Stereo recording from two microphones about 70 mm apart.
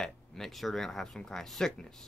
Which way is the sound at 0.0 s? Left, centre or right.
Centre.